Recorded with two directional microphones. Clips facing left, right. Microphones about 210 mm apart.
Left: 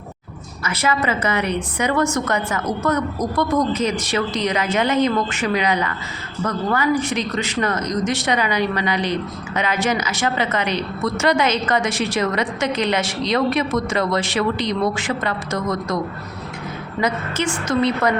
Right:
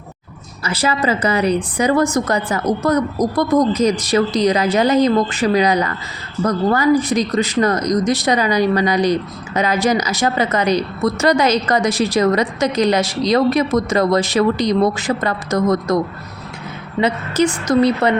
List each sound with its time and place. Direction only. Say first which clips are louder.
0.6 s speech: right 3 dB; 30° right (ahead or behind)
17.0 s speech: right 6 dB; 40° right (ahead or behind)